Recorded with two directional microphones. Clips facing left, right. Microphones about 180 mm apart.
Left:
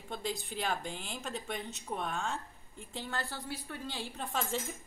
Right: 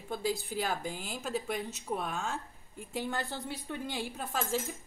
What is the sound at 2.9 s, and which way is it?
A woman's voice, 15° right (ahead or behind).